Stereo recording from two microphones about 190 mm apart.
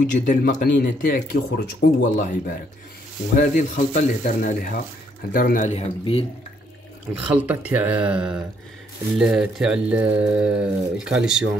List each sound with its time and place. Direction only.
0.0 s speech: 45° left (ahead or behind)
3.3 s speech: 40° left (ahead or behind)
7.2 s speech: 10° right (ahead or behind)